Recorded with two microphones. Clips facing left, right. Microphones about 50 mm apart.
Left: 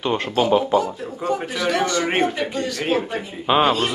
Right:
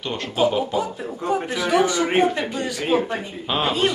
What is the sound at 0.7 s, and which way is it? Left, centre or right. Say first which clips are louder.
Speech: left 5 dB; centre.